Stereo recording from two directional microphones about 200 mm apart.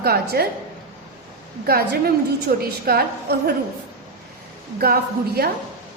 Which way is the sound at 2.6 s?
50° right (ahead or behind).